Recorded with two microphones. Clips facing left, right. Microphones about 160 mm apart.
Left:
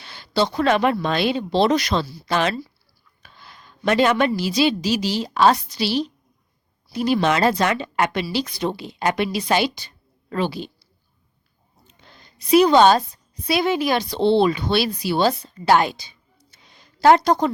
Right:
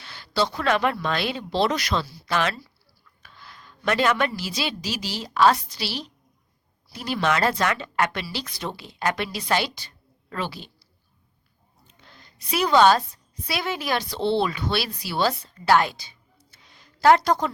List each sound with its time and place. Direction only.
0.0 s a woman's voice: 20° left (ahead or behind)
12.0 s a sound: 20° left (ahead or behind)
13.5 s speech: 20° left (ahead or behind)